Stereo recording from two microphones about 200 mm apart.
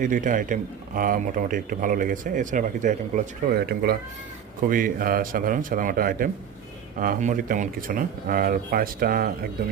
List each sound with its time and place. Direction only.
0.0 s speech: 40° right (ahead or behind)